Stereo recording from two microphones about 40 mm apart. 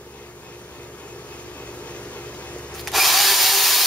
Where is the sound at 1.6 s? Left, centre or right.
Left.